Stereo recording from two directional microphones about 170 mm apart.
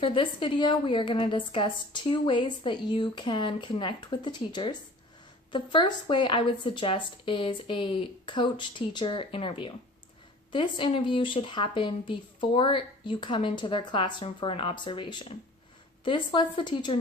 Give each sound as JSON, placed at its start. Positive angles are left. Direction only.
{"t": 0.0, "sound": "a woman's voice", "side_deg": 30}